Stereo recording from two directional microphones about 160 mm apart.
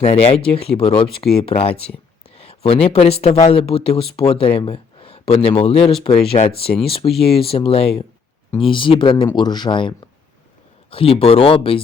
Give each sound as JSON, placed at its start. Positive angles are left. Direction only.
{"t": 0.0, "sound": "speech", "side_deg": 40}
{"t": 6.4, "sound": "speech", "side_deg": 50}
{"t": 6.8, "sound": "speech", "side_deg": 35}
{"t": 10.9, "sound": "speech", "side_deg": 35}